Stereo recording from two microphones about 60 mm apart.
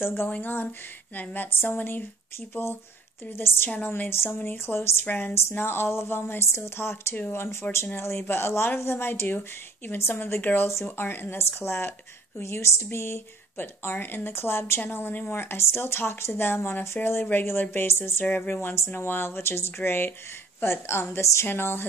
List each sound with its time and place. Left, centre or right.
0.0 s speech: left
0.3 s a woman's voice: left
1.8 s speech: left
3.3 s a woman's voice: left
5.0 s speech: left
5.6 s speech: left
7.2 s a woman's voice: left
7.7 s a woman's voice: left
10.7 s speech: left
11.0 s a woman's voice: left
18.2 s a woman's voice: left
21.2 s speech: left
21.5 s a woman's voice: left